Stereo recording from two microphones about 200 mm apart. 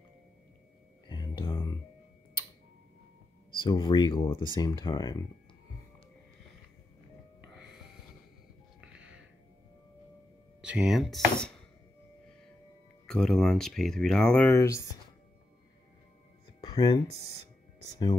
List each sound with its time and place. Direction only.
1.0 s a sound: 20° left (ahead or behind)
3.6 s speech: 20° left (ahead or behind)
10.6 s speech: 5° right (ahead or behind)
13.0 s speech: centre (ahead or behind)
16.6 s speech: 20° left (ahead or behind)